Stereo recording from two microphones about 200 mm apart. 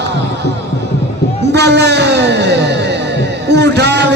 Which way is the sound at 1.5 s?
55° right (ahead or behind).